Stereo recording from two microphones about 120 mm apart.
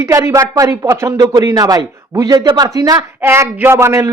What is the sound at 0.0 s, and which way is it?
A woman's voice, 25° right (ahead or behind).